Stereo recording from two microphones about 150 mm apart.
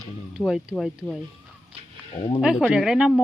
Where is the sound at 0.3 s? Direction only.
5° right (ahead or behind).